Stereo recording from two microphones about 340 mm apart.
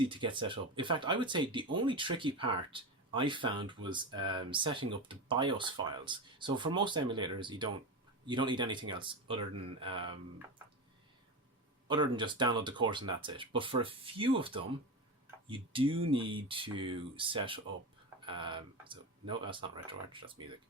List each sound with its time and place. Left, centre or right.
0.0 s speech: centre
9.5 s speech: right
9.8 s speech: centre
11.9 s speech: centre